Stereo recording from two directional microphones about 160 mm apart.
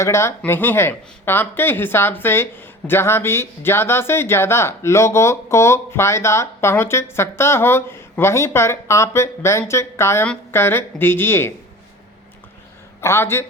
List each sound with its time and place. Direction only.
0.0 s speech: 15° left (ahead or behind)
13.0 s speech: 15° left (ahead or behind)